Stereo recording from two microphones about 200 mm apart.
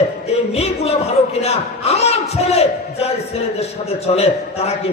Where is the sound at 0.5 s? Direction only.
30° left (ahead or behind).